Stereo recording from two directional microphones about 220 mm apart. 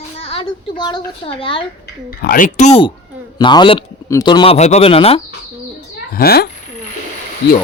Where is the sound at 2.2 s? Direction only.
40° left (ahead or behind).